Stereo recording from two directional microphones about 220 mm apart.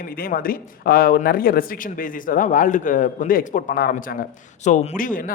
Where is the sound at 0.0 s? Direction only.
40° left (ahead or behind).